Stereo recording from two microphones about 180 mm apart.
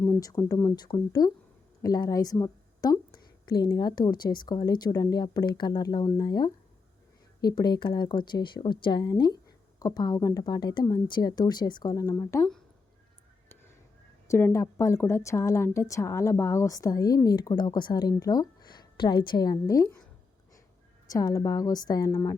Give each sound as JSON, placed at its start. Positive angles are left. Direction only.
{"t": 0.2, "sound": "a woman's voice", "side_deg": 20}
{"t": 14.3, "sound": "a woman's voice", "side_deg": 15}
{"t": 21.1, "sound": "a woman's voice", "side_deg": 20}